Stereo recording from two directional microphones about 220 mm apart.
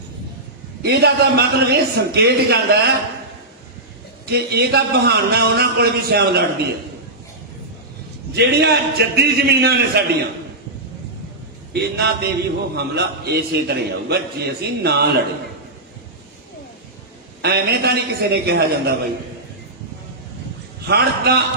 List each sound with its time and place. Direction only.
0.8 s a man's voice: 45° right (ahead or behind)
4.3 s a man's voice: 45° right (ahead or behind)
8.4 s a man's voice: 45° right (ahead or behind)
11.7 s a man's voice: 45° right (ahead or behind)
17.4 s a man's voice: 45° right (ahead or behind)
20.8 s a man's voice: 45° right (ahead or behind)